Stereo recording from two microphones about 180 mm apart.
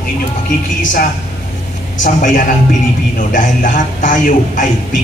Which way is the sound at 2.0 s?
45° left (ahead or behind).